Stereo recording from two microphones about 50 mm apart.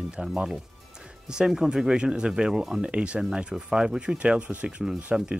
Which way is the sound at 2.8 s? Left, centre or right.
Right.